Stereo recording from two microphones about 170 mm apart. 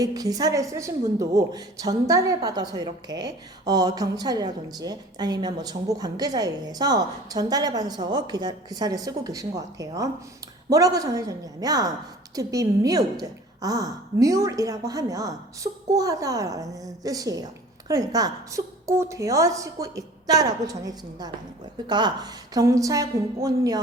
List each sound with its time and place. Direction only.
0.0 s a woman's voice: 20° right (ahead or behind)